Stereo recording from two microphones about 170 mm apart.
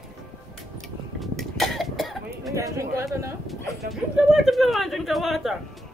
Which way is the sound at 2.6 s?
15° right (ahead or behind).